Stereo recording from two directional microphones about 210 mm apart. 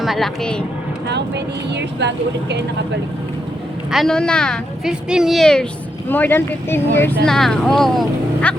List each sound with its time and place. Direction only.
0.0 s a woman's voice: centre (ahead or behind)
1.7 s speech: 55° right (ahead or behind)
3.9 s a woman's voice: centre (ahead or behind)